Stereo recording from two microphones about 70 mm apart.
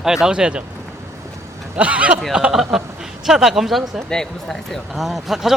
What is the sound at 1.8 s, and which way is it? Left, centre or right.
Speech, centre.